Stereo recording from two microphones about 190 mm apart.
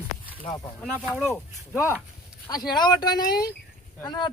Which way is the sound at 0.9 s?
5° right (ahead or behind).